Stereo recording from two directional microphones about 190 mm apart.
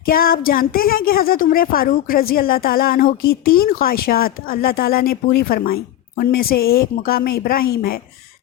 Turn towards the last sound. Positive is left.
turn(degrees=55)  # may be behind; listen again after turning